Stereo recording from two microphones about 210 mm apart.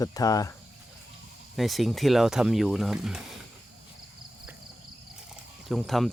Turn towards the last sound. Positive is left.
turn(degrees=0)  # may be behind; listen again after turning